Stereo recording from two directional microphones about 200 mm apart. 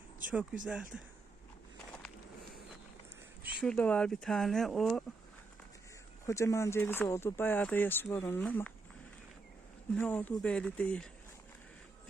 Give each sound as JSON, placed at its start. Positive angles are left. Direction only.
{"t": 0.6, "sound": "speech", "side_deg": -5}
{"t": 3.6, "sound": "speech", "side_deg": 5}
{"t": 6.2, "sound": "speech", "side_deg": 15}
{"t": 9.9, "sound": "speech", "side_deg": 5}